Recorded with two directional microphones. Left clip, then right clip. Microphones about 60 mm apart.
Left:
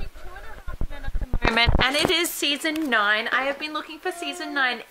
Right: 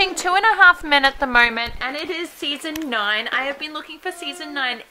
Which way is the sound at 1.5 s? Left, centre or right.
Left.